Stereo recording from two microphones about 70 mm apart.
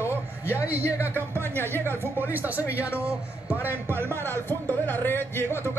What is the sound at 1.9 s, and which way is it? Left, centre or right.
Speech, right.